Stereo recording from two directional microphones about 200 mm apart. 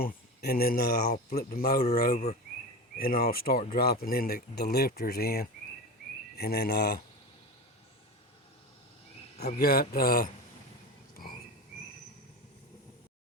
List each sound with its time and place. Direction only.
0.0 s speech: 50° left (ahead or behind)
2.1 s speech: 30° left (ahead or behind)
3.0 s speech: 50° left (ahead or behind)
9.6 s speech: 50° left (ahead or behind)